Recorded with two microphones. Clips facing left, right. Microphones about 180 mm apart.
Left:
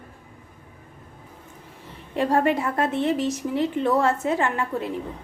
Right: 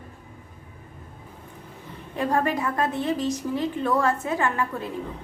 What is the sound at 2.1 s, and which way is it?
A woman's voice, 25° left (ahead or behind).